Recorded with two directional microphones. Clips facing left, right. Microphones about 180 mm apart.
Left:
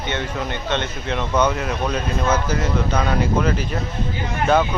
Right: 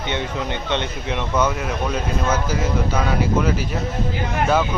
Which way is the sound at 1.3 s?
5° right (ahead or behind).